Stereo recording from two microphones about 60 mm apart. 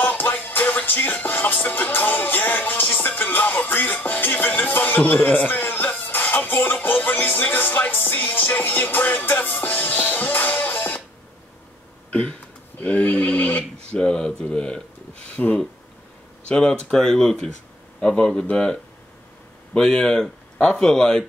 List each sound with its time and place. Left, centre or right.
0.3 s music: left
3.2 s speech: left
9.7 s music: left
12.1 s a sound: centre
13.0 s sheep: left
13.8 s speech: centre